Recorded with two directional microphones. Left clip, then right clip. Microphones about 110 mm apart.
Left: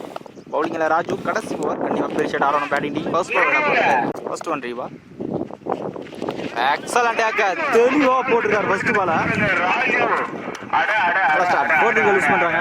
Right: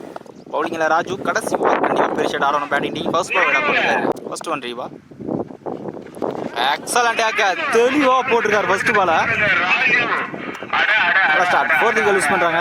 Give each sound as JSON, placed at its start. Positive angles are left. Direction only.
{"t": 0.5, "sound": "speech", "side_deg": -15}
{"t": 2.6, "sound": "speech", "side_deg": -5}
{"t": 2.8, "sound": "speech", "side_deg": -15}
{"t": 3.2, "sound": "speech", "side_deg": -45}
{"t": 4.3, "sound": "speech", "side_deg": -20}
{"t": 6.6, "sound": "speech", "side_deg": -15}
{"t": 7.5, "sound": "speech", "side_deg": -50}
{"t": 7.8, "sound": "speech", "side_deg": -30}
{"t": 8.2, "sound": "speech", "side_deg": -50}
{"t": 10.7, "sound": "a sound", "side_deg": -45}
{"t": 12.0, "sound": "speech", "side_deg": -35}